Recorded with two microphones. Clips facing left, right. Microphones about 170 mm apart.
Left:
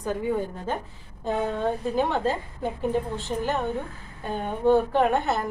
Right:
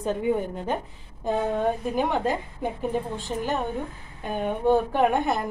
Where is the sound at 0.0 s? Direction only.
20° right (ahead or behind).